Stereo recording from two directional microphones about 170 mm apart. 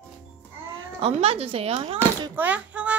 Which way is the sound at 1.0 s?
35° right (ahead or behind).